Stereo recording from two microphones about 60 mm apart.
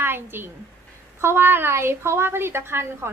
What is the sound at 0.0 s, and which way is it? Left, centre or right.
A woman's voice, right.